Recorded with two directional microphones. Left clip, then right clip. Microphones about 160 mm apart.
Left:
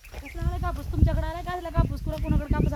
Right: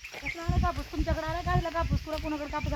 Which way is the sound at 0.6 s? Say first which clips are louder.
Left 1 dB; 10° left (ahead or behind).